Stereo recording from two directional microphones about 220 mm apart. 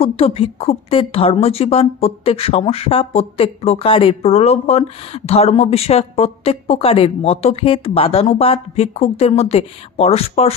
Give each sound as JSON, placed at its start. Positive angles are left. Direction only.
{"t": 0.0, "sound": "a woman's voice", "side_deg": 25}